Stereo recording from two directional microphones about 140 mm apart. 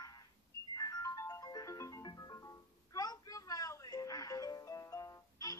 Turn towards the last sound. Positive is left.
turn(degrees=25)  # may be behind; listen again after turning